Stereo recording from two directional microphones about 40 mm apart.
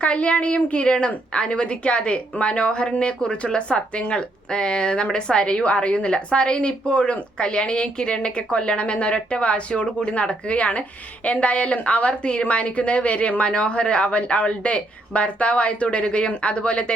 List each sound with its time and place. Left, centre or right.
0.0 s a woman's voice: left